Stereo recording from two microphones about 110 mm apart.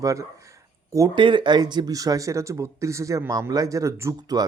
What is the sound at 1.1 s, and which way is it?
Speech, 50° right (ahead or behind).